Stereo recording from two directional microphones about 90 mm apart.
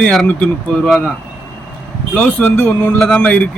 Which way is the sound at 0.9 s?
Centre (ahead or behind).